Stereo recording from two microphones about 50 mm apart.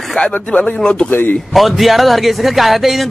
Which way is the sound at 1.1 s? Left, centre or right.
Left.